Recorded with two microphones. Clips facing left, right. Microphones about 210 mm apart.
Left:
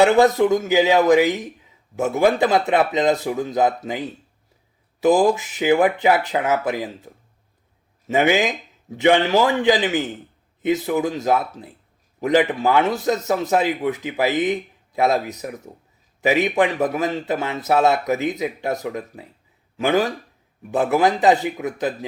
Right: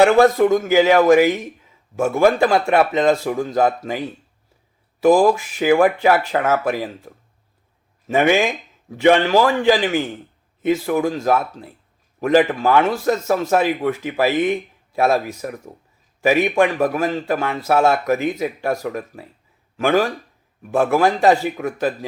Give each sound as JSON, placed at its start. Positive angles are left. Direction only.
{"t": 0.0, "sound": "speech", "side_deg": 20}
{"t": 5.0, "sound": "speech", "side_deg": 20}
{"t": 8.0, "sound": "speech", "side_deg": 20}